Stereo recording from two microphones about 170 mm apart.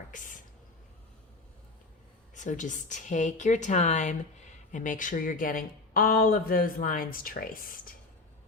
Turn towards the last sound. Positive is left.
turn(degrees=55)  # may be behind; listen again after turning